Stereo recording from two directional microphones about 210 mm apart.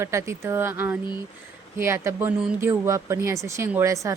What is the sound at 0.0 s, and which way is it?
A woman's voice, 15° right (ahead or behind).